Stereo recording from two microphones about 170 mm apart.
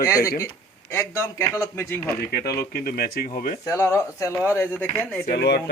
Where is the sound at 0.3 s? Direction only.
15° left (ahead or behind).